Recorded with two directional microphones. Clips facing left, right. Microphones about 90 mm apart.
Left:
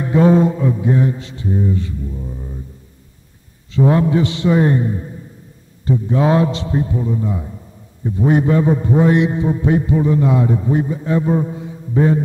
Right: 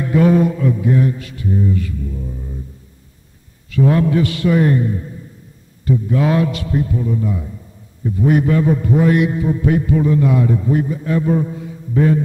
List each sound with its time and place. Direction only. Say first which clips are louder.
0.0 s a man's voice: left 1 dB; 25° left (ahead or behind)
3.7 s a man's voice: even; 25° left (ahead or behind)